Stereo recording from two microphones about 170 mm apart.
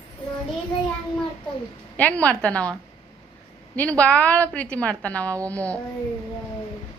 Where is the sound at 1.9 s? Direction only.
10° left (ahead or behind).